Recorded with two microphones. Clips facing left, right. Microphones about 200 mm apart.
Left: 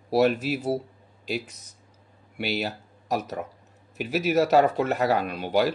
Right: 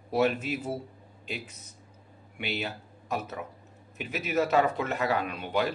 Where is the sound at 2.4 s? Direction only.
40° left (ahead or behind).